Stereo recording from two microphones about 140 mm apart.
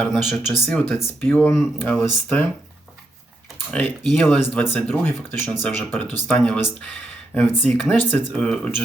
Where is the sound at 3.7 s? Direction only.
10° left (ahead or behind).